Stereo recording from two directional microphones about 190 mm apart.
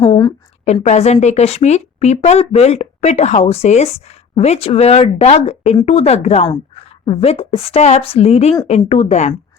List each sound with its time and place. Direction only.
0.0 s a woman's voice: 25° left (ahead or behind)
0.6 s speech: 35° left (ahead or behind)